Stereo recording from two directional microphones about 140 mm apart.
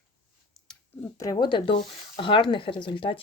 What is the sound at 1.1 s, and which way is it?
Speech, 25° left (ahead or behind).